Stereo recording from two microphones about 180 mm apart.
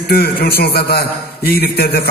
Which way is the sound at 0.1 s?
60° left (ahead or behind).